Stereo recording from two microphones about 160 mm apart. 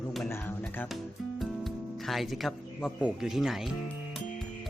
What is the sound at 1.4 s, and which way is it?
Speech, centre (ahead or behind).